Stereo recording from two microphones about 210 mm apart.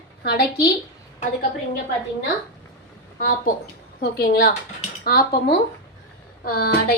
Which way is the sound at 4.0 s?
45° left (ahead or behind).